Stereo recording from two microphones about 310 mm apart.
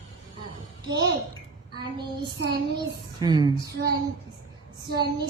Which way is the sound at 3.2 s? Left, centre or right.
Centre.